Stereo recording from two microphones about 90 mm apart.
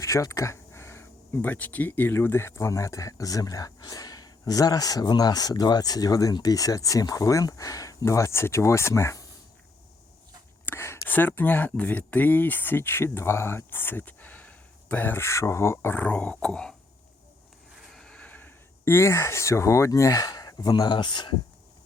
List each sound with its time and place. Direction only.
0.0 s speech: 35° left (ahead or behind)
10.7 s speech: 30° left (ahead or behind)
16.0 s speech: 15° left (ahead or behind)
17.9 s speech: 10° left (ahead or behind); by 21.3 s 60° left (ahead or behind)